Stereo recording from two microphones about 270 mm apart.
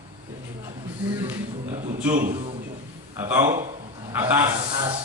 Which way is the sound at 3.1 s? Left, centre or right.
Centre.